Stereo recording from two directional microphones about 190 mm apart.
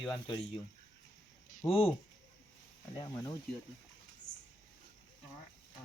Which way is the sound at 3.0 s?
20° left (ahead or behind).